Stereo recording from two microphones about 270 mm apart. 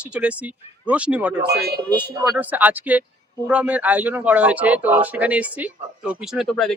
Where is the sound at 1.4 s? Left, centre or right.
Right.